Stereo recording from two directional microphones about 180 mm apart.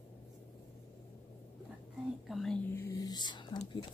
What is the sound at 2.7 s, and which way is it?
Whispering, 15° left (ahead or behind).